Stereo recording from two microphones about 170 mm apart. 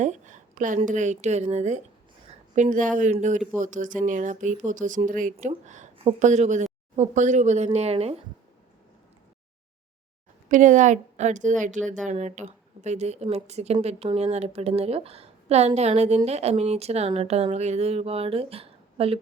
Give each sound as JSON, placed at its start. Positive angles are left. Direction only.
{"t": 0.0, "sound": "a sound", "side_deg": -45}
{"t": 0.9, "sound": "a woman's voice", "side_deg": -45}
{"t": 10.5, "sound": "a woman's voice", "side_deg": -50}